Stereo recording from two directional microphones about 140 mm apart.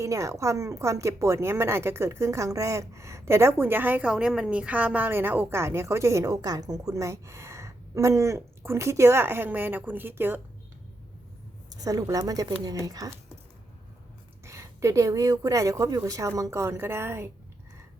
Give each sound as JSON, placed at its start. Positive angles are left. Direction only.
{"t": 0.0, "sound": "a woman's voice", "side_deg": -20}
{"t": 11.8, "sound": "a woman's voice", "side_deg": -25}
{"t": 14.4, "sound": "a woman's voice", "side_deg": -20}